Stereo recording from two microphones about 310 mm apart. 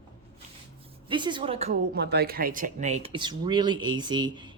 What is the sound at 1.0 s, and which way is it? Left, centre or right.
Speech, centre.